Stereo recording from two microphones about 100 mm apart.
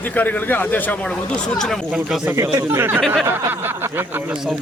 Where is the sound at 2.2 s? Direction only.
30° right (ahead or behind).